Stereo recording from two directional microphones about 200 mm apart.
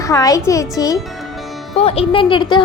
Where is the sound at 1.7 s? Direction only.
30° left (ahead or behind).